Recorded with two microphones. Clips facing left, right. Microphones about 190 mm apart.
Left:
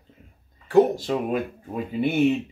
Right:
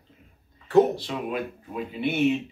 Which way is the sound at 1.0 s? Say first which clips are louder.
Left 5 dB; 45° left (ahead or behind).